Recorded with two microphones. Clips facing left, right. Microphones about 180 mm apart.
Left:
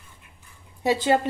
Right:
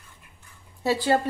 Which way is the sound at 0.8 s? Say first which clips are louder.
Left 1 dB; 20° left (ahead or behind).